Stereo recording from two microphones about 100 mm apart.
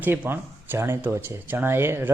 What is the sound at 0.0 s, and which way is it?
Speech, 20° right (ahead or behind).